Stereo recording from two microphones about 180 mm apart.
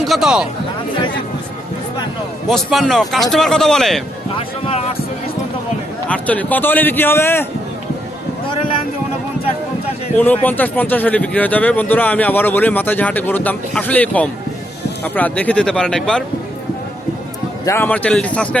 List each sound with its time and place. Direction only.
0.0 s speech: centre (ahead or behind)
2.5 s speech: centre (ahead or behind)
4.6 s speech: 35° left (ahead or behind)
6.1 s a man's voice: 10° left (ahead or behind)
10.2 s a man's voice: 10° left (ahead or behind)
17.7 s a man's voice: 10° left (ahead or behind)